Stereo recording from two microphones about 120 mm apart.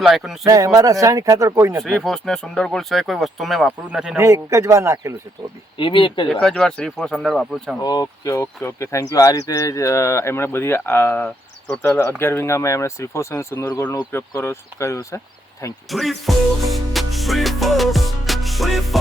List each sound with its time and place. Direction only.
0.0 s speech: 5° right (ahead or behind)
0.4 s speech: 30° right (ahead or behind)
1.8 s speech: centre (ahead or behind)
4.2 s speech: 25° right (ahead or behind)
5.7 s speech: 45° left (ahead or behind)
6.4 s speech: 5° left (ahead or behind)
7.8 s speech: 30° left (ahead or behind)
15.9 s music: centre (ahead or behind)